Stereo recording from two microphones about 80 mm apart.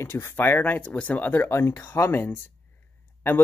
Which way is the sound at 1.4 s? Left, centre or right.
Left.